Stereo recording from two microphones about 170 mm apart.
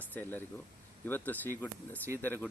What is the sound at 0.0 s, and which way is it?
Speech, 10° left (ahead or behind).